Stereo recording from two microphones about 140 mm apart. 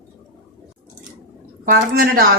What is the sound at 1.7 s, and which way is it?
Speech, 90° right.